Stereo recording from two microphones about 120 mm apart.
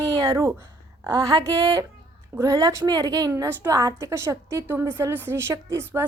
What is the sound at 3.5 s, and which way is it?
Speech, 20° right (ahead or behind).